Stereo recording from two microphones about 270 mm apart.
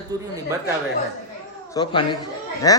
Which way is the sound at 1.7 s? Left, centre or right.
Centre.